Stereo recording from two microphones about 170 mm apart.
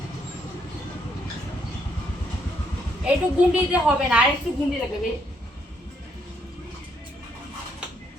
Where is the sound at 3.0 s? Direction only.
5° right (ahead or behind).